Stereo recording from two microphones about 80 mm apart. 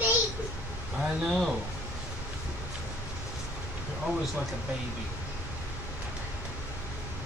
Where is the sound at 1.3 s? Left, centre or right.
Centre.